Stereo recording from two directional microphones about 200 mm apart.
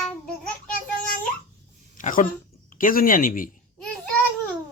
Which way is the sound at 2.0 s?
45° left (ahead or behind).